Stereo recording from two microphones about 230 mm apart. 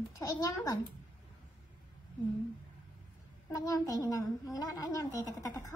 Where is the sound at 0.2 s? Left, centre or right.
Centre.